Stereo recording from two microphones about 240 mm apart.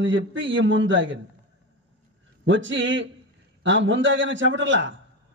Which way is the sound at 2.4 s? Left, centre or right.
Right.